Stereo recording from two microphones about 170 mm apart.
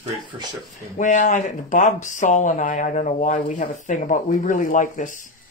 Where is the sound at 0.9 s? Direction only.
45° left (ahead or behind).